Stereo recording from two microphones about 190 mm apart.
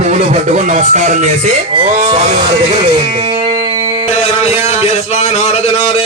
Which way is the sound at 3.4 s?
25° right (ahead or behind).